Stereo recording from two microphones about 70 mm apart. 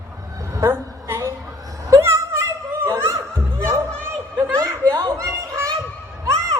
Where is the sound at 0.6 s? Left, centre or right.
Right.